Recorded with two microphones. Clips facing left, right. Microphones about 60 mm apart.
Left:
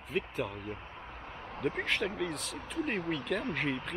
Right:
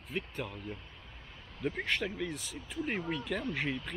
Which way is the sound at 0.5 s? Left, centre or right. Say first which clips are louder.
Left 3 dB; left.